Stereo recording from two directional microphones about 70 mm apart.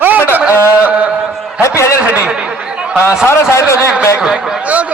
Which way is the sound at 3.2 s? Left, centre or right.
Left.